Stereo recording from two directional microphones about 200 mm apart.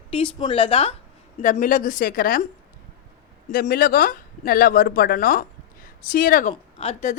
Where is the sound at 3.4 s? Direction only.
45° left (ahead or behind).